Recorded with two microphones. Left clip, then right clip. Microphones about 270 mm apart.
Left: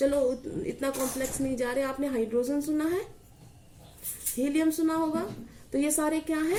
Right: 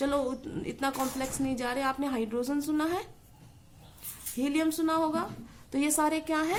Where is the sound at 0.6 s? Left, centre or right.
Right.